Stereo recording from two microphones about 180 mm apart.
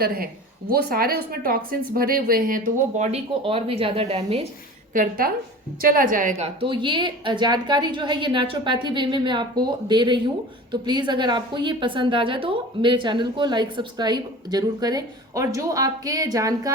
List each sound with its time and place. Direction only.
0.0 s a woman's voice: 55° right (ahead or behind); by 4.4 s 35° right (ahead or behind)
4.9 s a woman's voice: 55° right (ahead or behind); by 16.7 s 20° right (ahead or behind)